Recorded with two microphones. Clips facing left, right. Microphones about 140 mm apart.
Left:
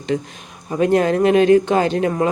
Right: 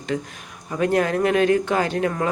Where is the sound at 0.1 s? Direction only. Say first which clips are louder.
Left 4 dB; 25° left (ahead or behind).